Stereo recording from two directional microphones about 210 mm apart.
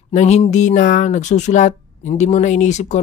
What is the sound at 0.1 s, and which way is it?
Speech, 30° left (ahead or behind).